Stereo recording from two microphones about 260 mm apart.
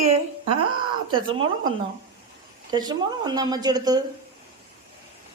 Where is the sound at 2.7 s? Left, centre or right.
Centre.